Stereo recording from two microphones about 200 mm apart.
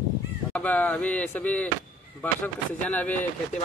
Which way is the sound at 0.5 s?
5° left (ahead or behind).